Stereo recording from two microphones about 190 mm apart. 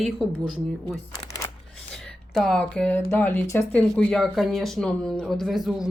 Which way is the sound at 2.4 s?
5° left (ahead or behind).